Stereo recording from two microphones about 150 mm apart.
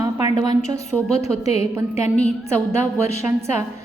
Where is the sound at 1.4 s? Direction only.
40° left (ahead or behind).